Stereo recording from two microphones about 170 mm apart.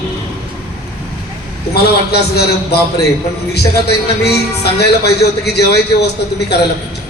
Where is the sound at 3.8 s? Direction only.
75° left (ahead or behind).